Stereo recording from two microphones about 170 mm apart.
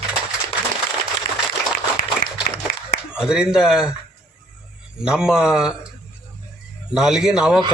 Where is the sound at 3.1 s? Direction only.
5° right (ahead or behind).